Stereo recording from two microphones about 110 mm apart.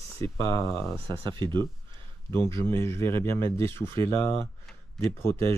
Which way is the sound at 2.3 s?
25° left (ahead or behind).